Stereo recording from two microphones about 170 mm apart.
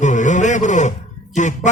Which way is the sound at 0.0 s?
45° left (ahead or behind).